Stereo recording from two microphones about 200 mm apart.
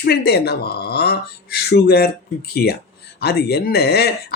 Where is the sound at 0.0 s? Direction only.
55° left (ahead or behind).